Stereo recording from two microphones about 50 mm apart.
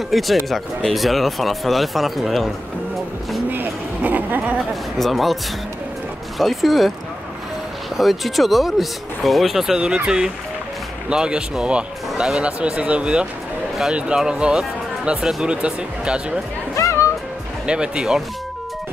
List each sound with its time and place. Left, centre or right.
0.1 s speech: centre
3.4 s a sound: right
4.9 s speech: centre
8.0 s speech: centre
9.8 s speech: right
16.7 s music: left
17.6 s speech: centre